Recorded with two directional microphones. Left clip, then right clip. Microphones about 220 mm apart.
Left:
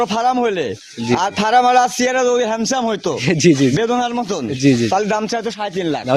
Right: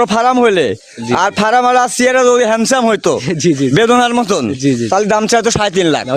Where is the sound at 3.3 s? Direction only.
Centre (ahead or behind).